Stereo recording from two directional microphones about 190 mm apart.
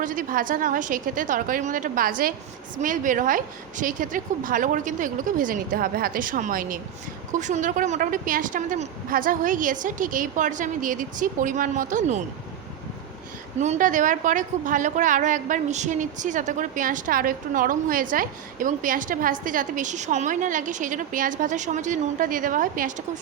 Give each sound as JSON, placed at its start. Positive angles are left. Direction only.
{"t": 0.0, "sound": "a woman's voice", "side_deg": -45}
{"t": 13.6, "sound": "a woman's voice", "side_deg": -40}